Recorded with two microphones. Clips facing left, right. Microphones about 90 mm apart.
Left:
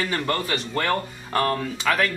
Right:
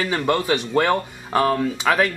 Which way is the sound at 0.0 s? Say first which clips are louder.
Right 4 dB; 15° right (ahead or behind).